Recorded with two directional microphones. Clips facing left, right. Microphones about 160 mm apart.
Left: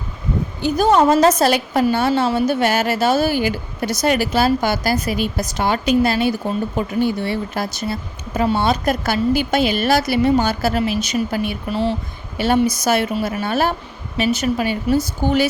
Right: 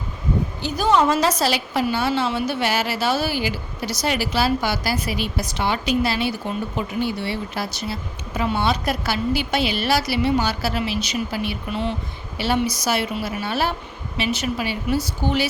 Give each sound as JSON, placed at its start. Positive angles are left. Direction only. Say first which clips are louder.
{"t": 0.6, "sound": "a woman's voice", "louder": "left 5 dB", "side_deg": 45}